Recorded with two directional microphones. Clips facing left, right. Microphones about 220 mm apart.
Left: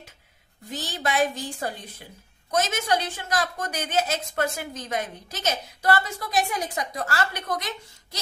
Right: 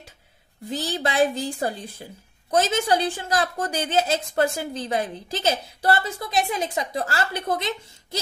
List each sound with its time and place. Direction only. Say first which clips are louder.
0.7 s a woman's voice: right 3 dB; 30° right (ahead or behind)